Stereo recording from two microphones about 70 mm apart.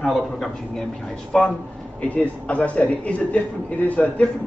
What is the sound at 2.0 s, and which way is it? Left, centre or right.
A man's voice, left.